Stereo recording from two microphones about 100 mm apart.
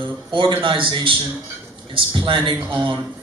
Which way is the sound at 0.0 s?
55° right (ahead or behind).